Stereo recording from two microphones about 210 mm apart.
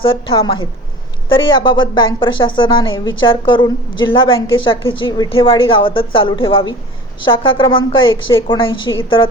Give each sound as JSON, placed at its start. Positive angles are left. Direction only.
{"t": 0.0, "sound": "a woman's voice", "side_deg": 25}